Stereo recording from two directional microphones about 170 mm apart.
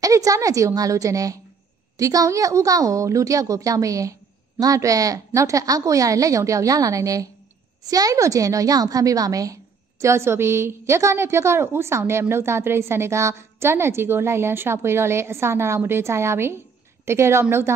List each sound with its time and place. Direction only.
0.0 s a woman's voice: 20° right (ahead or behind)